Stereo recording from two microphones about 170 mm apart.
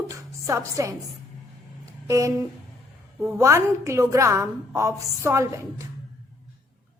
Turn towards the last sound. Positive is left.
turn(degrees=-15)  # may be behind; listen again after turning